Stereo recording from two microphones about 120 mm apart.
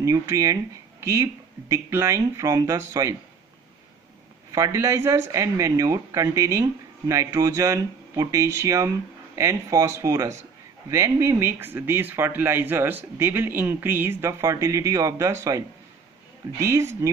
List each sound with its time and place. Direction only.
0.0 s speech: 25° right (ahead or behind)
4.5 s speech: 25° right (ahead or behind)